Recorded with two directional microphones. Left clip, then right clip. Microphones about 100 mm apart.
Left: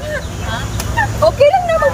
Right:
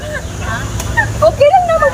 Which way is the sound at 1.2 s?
10° left (ahead or behind).